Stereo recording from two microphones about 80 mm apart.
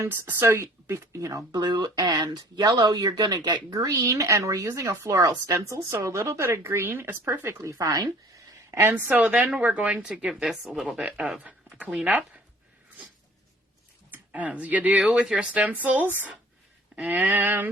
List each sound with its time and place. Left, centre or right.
0.0 s speech: right
1.5 s speech: right
7.6 s speech: right
8.7 s speech: right
9.0 s speech: centre
10.1 s speech: centre
10.8 s speech: centre
14.1 s speech: centre